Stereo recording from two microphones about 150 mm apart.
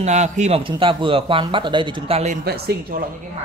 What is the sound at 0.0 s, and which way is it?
Speech, 50° right (ahead or behind).